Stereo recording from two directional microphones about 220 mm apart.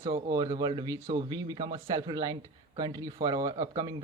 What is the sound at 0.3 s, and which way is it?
A man's voice, 20° right (ahead or behind).